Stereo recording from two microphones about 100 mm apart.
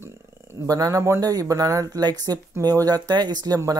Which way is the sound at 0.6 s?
35° right (ahead or behind).